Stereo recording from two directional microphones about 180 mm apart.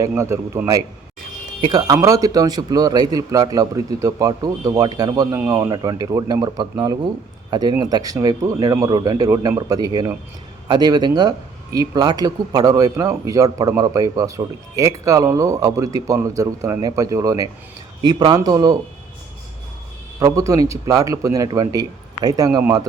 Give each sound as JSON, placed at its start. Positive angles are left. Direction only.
{"t": 0.2, "sound": "a man's voice", "side_deg": -15}
{"t": 20.1, "sound": "speech", "side_deg": -20}